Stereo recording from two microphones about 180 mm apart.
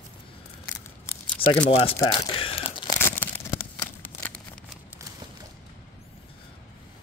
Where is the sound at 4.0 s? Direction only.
10° left (ahead or behind).